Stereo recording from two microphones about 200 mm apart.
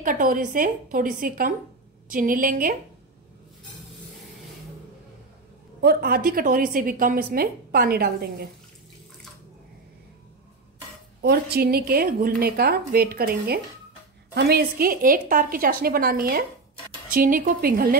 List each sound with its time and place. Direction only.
0.0 s a woman's voice: 40° right (ahead or behind)
5.8 s a woman's voice: 50° right (ahead or behind)
11.1 s a woman's voice: 55° right (ahead or behind)